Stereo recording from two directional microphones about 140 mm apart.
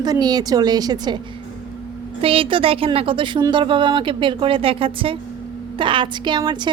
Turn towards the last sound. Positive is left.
turn(degrees=-30)  # may be behind; listen again after turning